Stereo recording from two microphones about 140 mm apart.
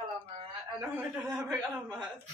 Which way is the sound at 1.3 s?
5° right (ahead or behind).